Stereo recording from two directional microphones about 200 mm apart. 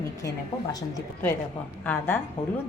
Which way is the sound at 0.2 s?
20° left (ahead or behind).